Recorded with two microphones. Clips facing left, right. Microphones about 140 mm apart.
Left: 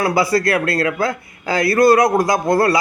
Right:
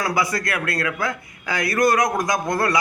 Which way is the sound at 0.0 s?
30° left (ahead or behind).